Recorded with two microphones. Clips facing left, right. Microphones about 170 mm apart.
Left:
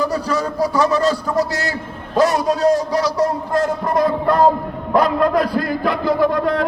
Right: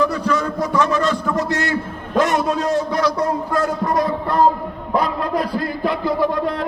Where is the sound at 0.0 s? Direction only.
35° left (ahead or behind).